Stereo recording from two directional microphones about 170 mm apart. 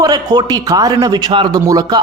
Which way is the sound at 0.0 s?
25° right (ahead or behind).